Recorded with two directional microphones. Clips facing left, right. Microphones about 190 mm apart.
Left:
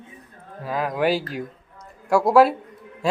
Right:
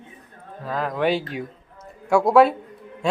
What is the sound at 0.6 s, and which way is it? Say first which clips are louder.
Speech: even; 5° left (ahead or behind).